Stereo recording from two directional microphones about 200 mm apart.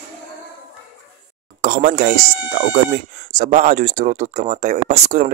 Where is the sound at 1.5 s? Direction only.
40° right (ahead or behind).